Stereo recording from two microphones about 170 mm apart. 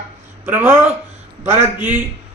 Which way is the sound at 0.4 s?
15° right (ahead or behind).